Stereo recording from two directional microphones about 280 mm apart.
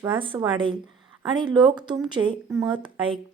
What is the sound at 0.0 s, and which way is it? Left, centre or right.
A woman's voice, centre.